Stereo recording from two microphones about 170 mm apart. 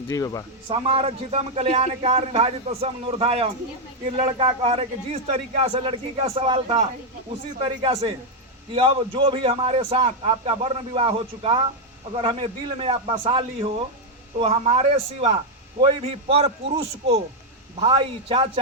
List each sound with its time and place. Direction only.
0.1 s speech: 20° left (ahead or behind)
0.7 s a man's voice: 30° right (ahead or behind)
17.7 s a man's voice: 30° right (ahead or behind)